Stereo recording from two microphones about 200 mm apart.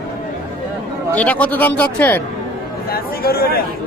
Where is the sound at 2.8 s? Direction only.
50° left (ahead or behind).